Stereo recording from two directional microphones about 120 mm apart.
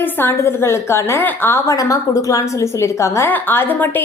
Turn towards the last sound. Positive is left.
turn(degrees=15)  # may be behind; listen again after turning